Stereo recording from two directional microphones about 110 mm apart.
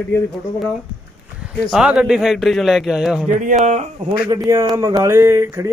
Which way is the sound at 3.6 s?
90° right.